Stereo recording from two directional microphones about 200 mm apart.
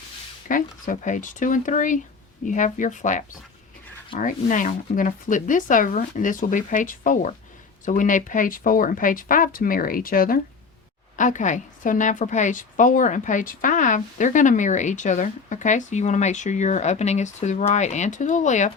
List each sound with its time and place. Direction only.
0.4 s a woman's voice: 40° left (ahead or behind)